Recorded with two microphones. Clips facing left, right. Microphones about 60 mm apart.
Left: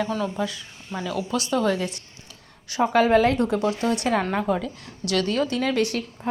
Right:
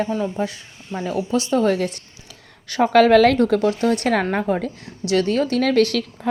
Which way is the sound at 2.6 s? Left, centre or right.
Right.